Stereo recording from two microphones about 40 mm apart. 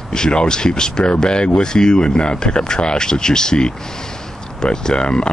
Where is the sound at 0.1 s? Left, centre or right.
Left.